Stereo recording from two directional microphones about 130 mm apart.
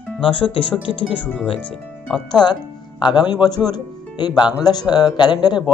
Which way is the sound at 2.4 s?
35° left (ahead or behind).